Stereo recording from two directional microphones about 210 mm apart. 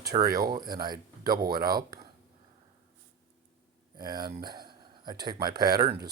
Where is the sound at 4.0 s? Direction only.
20° right (ahead or behind).